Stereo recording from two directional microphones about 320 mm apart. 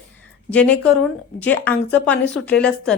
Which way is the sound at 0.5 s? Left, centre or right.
Centre.